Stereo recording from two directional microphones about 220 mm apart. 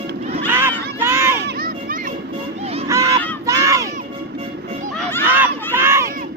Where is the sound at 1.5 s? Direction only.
40° right (ahead or behind).